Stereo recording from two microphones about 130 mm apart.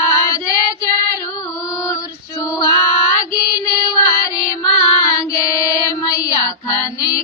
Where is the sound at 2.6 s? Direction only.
25° left (ahead or behind).